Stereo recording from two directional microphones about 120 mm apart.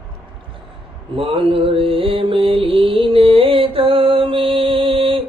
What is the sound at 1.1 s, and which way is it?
Mantra, 50° right (ahead or behind).